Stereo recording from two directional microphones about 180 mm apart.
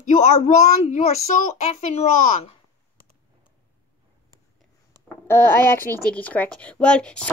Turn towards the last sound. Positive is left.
turn(degrees=5)  # may be behind; listen again after turning